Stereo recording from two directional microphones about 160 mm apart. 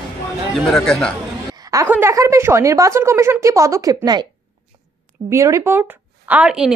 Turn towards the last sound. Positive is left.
turn(degrees=-5)  # may be behind; listen again after turning